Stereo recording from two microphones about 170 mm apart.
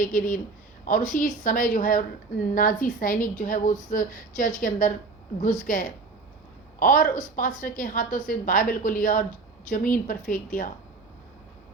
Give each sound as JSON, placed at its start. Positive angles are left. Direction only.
{"t": 0.0, "sound": "a woman's voice", "side_deg": 55}